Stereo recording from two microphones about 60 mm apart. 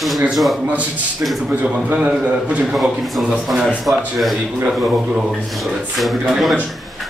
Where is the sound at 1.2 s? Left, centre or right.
Right.